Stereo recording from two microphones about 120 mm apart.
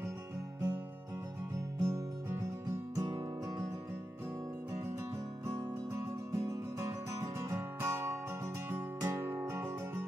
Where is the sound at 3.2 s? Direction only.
25° right (ahead or behind).